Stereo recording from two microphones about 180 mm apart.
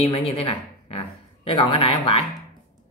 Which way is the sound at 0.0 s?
35° left (ahead or behind).